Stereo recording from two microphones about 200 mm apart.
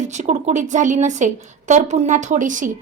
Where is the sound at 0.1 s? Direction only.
35° right (ahead or behind).